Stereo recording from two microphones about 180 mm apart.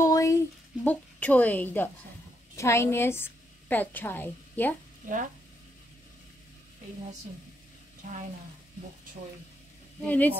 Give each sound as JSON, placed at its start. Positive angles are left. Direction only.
{"t": 0.0, "sound": "a sound", "side_deg": 15}
{"t": 0.8, "sound": "a woman's voice", "side_deg": 10}
{"t": 5.0, "sound": "stir", "side_deg": -45}
{"t": 8.0, "sound": "stir", "side_deg": -45}
{"t": 10.0, "sound": "a woman's voice", "side_deg": 10}